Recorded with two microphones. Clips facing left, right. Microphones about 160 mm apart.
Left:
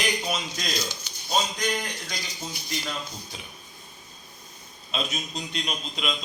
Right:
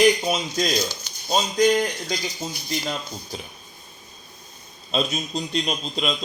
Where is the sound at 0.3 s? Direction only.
35° right (ahead or behind).